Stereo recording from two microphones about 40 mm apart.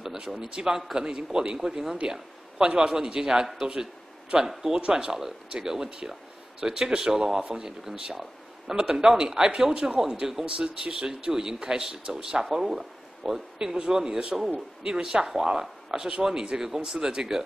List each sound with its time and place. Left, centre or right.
0.0 s speech: centre